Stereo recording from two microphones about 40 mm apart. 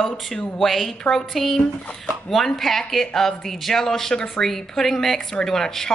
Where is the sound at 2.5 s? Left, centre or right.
Centre.